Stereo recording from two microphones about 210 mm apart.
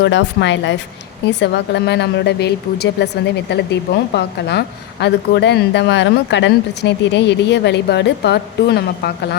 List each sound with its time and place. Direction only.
0.0 s a woman's voice: 60° left (ahead or behind)